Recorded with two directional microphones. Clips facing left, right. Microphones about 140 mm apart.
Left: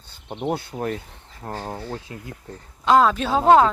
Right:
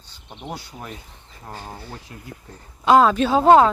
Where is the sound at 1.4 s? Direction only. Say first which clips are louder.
Left 5 dB; 50° left (ahead or behind).